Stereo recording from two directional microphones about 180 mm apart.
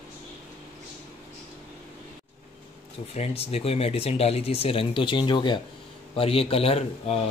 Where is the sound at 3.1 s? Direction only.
35° left (ahead or behind).